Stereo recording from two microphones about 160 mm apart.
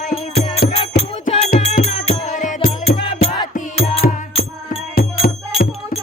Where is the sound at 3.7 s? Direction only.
35° left (ahead or behind).